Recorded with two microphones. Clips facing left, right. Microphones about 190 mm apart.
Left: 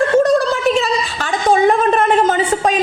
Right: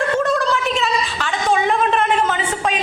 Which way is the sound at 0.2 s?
40° left (ahead or behind).